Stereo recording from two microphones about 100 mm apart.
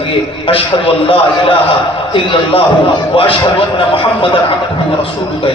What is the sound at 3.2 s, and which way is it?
A man's voice, 65° left (ahead or behind).